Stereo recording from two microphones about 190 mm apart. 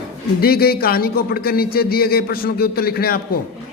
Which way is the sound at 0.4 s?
55° left (ahead or behind).